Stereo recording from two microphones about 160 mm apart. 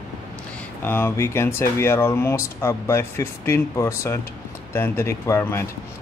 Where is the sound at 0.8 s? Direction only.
15° left (ahead or behind).